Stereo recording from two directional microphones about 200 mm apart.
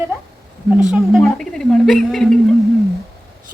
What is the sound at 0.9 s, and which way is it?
A woman's voice, centre (ahead or behind).